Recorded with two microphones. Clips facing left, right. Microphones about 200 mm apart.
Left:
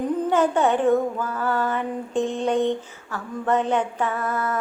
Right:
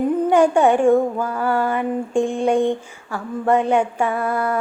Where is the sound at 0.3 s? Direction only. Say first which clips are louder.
Right 5 dB; 15° right (ahead or behind).